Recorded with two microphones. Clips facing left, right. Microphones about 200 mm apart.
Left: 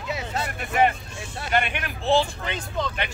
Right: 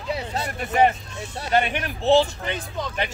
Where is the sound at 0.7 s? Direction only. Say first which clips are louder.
Right 2 dB; 40° right (ahead or behind).